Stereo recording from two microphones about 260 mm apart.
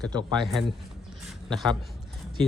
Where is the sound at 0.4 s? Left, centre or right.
Centre.